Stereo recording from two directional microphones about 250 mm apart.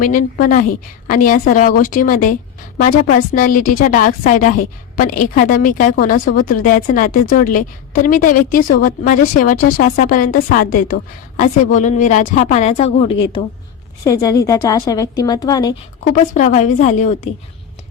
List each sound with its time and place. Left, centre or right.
0.0 s a woman's voice: left; by 15.7 s centre
16.3 s a woman's voice: left